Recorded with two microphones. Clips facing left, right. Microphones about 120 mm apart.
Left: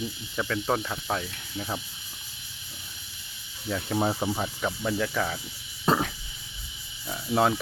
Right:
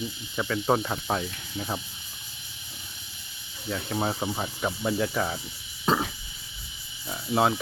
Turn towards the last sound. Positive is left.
turn(degrees=-5)  # may be behind; listen again after turning